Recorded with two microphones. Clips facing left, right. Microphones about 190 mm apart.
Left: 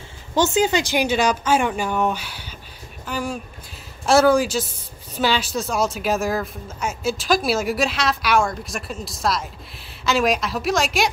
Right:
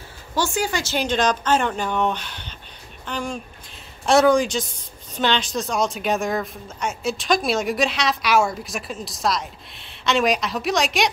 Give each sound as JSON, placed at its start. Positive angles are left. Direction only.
{"t": 0.4, "sound": "speech", "side_deg": 20}